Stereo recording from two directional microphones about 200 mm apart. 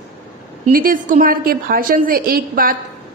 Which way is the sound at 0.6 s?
45° right (ahead or behind).